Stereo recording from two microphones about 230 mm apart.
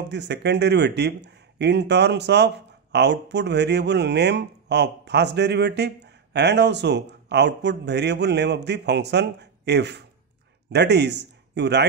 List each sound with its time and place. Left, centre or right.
0.1 s speech: right